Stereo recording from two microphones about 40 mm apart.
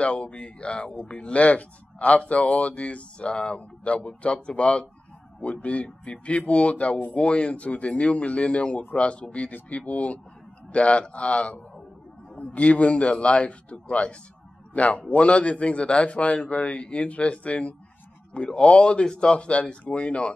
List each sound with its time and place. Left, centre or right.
0.0 s a man's voice: left